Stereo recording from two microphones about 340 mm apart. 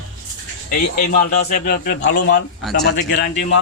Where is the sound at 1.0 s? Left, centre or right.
Left.